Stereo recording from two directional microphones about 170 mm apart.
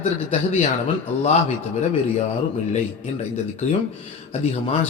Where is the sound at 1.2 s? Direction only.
40° left (ahead or behind).